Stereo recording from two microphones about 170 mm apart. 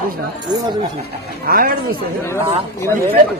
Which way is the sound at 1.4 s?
60° right (ahead or behind).